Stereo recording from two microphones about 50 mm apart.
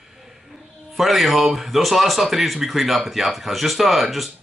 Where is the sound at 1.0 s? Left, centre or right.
Centre.